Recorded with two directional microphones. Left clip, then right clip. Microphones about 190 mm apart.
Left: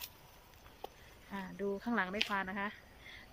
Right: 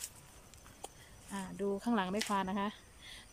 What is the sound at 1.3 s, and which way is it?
A woman's voice, 5° right (ahead or behind).